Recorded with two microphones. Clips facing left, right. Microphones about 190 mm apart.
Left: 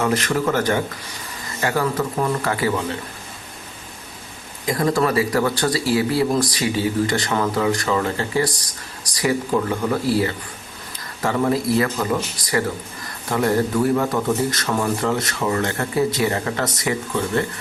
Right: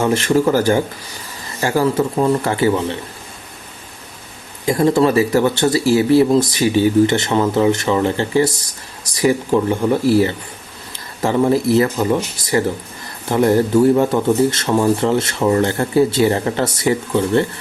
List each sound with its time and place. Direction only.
0.0 s a man's voice: 30° right (ahead or behind)
4.6 s a man's voice: 25° right (ahead or behind)